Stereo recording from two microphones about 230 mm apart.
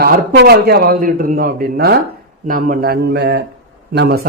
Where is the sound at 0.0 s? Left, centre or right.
Right.